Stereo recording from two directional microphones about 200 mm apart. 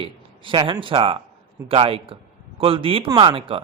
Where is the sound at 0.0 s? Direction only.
25° right (ahead or behind).